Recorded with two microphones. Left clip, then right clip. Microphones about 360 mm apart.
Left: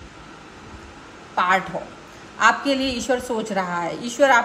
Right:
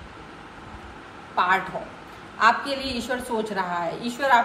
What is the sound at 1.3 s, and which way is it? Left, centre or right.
A woman's voice, left.